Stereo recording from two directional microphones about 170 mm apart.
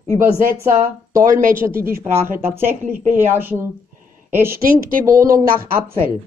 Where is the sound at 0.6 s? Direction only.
15° right (ahead or behind).